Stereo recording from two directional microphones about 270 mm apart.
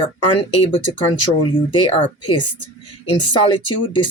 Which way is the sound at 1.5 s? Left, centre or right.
Centre.